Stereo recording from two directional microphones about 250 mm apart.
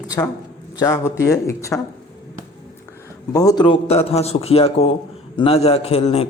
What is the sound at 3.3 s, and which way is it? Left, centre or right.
Speech, centre.